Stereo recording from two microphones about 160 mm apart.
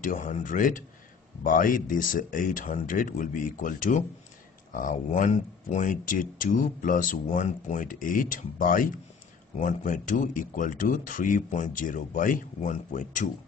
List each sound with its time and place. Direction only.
0.0 s speech: 55° left (ahead or behind)